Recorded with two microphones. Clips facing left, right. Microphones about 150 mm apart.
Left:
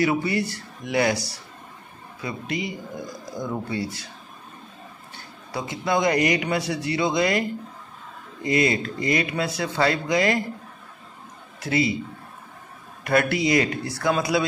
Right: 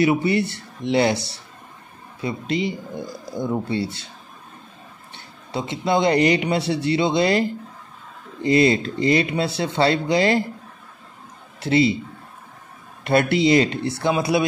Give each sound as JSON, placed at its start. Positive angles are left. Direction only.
{"t": 0.0, "sound": "speech", "side_deg": -25}
{"t": 5.1, "sound": "speech", "side_deg": -25}
{"t": 11.6, "sound": "speech", "side_deg": -30}
{"t": 13.0, "sound": "speech", "side_deg": -25}